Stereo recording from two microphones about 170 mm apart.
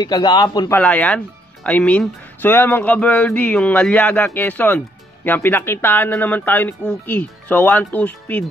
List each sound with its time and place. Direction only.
0.0 s a man's voice: 25° left (ahead or behind)
0.7 s speech: 10° left (ahead or behind)